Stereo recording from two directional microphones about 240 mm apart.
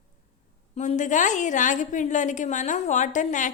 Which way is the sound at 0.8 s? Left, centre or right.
Left.